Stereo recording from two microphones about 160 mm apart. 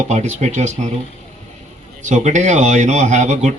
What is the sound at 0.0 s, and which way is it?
Speech, 45° right (ahead or behind).